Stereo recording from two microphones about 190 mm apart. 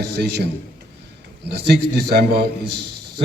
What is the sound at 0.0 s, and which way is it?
Speech, 60° right (ahead or behind).